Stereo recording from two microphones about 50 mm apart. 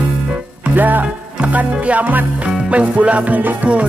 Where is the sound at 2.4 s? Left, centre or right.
Right.